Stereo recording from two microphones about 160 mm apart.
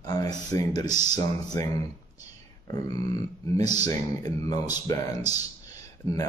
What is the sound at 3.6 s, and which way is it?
Speech, 45° right (ahead or behind).